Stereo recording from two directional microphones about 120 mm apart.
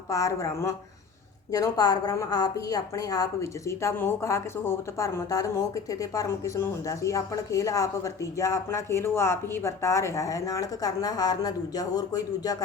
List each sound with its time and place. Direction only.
0.1 s a woman's voice: 25° left (ahead or behind)